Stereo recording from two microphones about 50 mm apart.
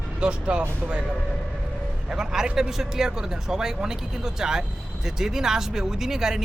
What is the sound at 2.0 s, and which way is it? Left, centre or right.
Speech, centre.